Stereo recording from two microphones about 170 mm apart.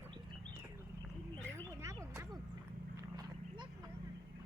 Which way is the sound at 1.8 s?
15° right (ahead or behind).